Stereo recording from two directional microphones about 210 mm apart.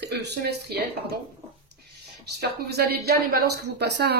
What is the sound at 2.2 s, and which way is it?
A woman's voice, 50° right (ahead or behind).